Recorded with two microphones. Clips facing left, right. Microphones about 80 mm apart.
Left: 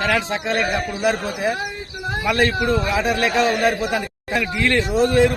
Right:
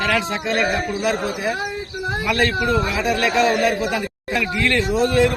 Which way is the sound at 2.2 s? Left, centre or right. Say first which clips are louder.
Left 1 dB; left.